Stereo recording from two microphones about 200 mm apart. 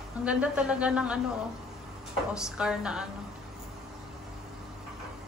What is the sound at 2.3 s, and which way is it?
Speech, 5° right (ahead or behind).